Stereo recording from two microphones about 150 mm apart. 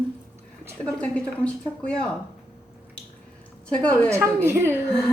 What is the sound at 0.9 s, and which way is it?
Speech, 5° left (ahead or behind).